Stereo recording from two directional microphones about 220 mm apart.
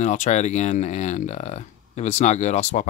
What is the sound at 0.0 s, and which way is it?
Speech, 35° left (ahead or behind).